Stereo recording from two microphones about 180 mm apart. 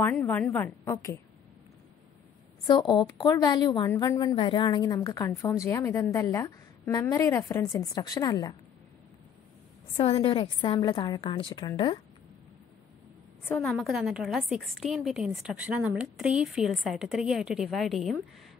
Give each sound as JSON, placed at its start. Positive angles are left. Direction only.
{"t": 0.0, "sound": "a woman's voice", "side_deg": 10}
{"t": 2.6, "sound": "a woman's voice", "side_deg": 25}
{"t": 9.9, "sound": "a woman's voice", "side_deg": 30}
{"t": 13.4, "sound": "a woman's voice", "side_deg": 10}
{"t": 13.7, "sound": "a woman's voice", "side_deg": 0}